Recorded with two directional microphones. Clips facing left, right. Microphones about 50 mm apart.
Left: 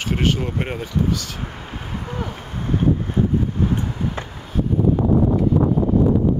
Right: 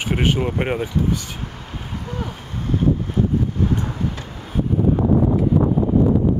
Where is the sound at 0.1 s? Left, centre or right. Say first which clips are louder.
Right 1 dB; centre.